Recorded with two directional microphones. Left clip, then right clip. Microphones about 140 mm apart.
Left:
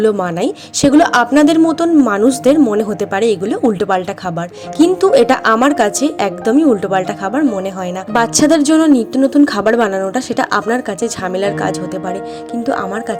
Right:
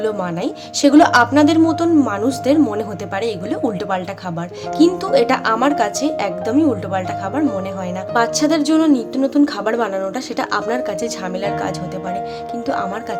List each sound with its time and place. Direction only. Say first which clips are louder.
0.0 s a woman's voice: left 6 dB; 40° left (ahead or behind)
8.1 s a woman's voice: left 4 dB; 50° left (ahead or behind)